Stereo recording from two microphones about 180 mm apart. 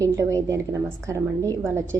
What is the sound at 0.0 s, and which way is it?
A woman's voice, 15° right (ahead or behind).